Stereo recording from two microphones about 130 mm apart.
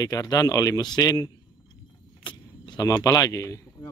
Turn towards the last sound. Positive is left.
turn(degrees=25)  # may be behind; listen again after turning